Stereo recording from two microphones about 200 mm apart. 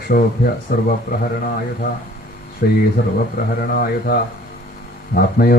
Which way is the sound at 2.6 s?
45° left (ahead or behind).